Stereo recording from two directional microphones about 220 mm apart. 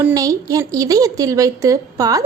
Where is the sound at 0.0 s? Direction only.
15° right (ahead or behind).